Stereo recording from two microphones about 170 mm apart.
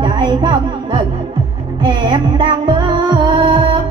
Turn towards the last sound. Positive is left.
turn(degrees=-25)  # may be behind; listen again after turning